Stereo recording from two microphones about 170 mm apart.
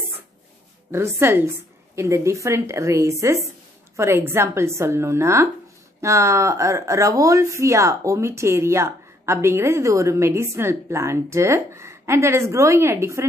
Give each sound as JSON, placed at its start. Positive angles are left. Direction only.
{"t": 0.9, "sound": "speech", "side_deg": -15}